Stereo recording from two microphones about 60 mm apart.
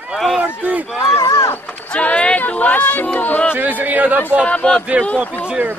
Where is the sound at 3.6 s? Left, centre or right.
Right.